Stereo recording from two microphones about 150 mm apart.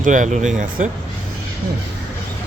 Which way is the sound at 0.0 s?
55° right (ahead or behind).